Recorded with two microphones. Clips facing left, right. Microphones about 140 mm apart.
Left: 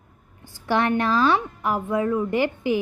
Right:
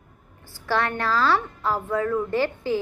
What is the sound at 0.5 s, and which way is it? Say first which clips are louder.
A woman's voice: left 4 dB; 20° left (ahead or behind).